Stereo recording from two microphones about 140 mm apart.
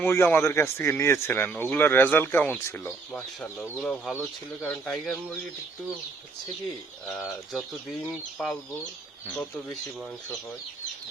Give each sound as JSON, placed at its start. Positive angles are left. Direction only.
{"t": 0.0, "sound": "speech", "side_deg": 15}
{"t": 3.6, "sound": "speech", "side_deg": 0}
{"t": 4.1, "sound": "speech", "side_deg": 15}
{"t": 9.2, "sound": "speech", "side_deg": 5}